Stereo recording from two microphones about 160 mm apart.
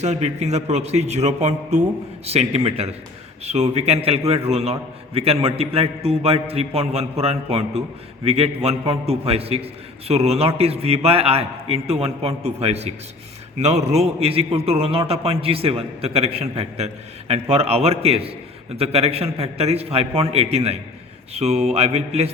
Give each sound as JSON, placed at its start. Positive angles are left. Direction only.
{"t": 0.0, "sound": "a man's voice", "side_deg": -45}